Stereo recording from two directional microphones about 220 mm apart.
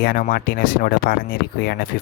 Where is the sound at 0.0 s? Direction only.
40° left (ahead or behind).